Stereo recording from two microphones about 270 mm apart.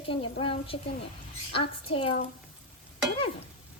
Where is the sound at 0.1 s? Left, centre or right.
Centre.